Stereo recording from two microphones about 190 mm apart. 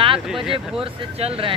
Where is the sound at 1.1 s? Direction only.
30° right (ahead or behind).